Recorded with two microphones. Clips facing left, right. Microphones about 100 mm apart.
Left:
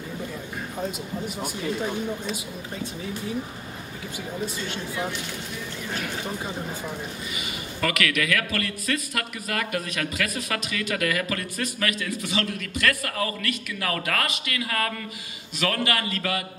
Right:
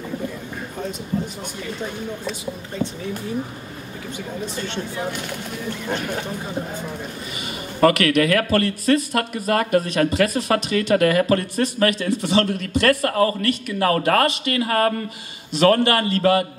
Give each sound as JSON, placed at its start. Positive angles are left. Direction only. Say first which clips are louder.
{"t": 7.8, "sound": "a man's voice", "louder": "right 10 dB", "side_deg": -35}